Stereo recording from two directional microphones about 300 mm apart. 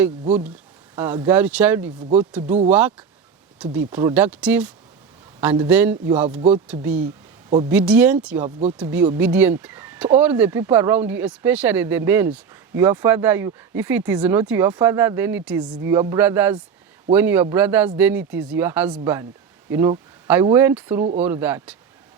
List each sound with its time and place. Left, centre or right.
0.9 s speech: centre